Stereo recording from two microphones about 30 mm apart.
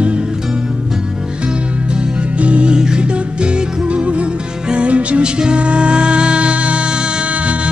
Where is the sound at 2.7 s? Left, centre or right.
Right.